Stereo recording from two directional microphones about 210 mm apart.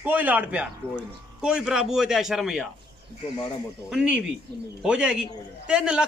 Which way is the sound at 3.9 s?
5° right (ahead or behind).